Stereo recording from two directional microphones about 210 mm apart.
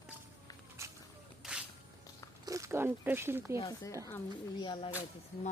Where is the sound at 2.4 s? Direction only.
15° right (ahead or behind).